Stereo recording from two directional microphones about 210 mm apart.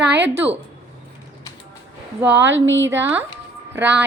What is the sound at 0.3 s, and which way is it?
Speech, 10° right (ahead or behind).